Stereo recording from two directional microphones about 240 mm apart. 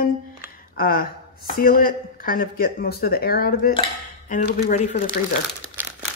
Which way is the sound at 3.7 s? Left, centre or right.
Left.